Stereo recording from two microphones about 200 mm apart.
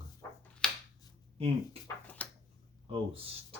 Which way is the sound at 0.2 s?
15° left (ahead or behind).